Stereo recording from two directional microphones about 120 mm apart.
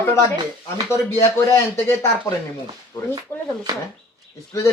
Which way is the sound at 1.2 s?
20° left (ahead or behind).